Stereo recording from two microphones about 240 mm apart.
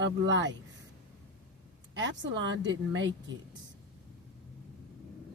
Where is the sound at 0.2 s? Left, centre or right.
Right.